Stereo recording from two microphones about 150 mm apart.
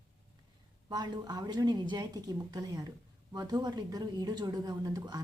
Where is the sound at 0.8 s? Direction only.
25° right (ahead or behind).